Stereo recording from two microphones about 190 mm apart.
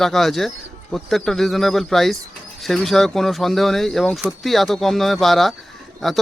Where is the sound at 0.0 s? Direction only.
Centre (ahead or behind).